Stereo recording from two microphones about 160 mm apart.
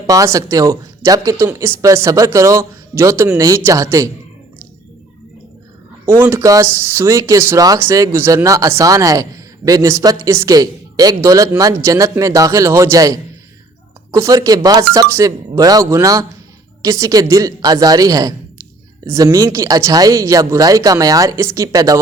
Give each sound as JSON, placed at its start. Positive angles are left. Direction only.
{"t": 0.1, "sound": "speech", "side_deg": -20}
{"t": 6.1, "sound": "speech", "side_deg": -15}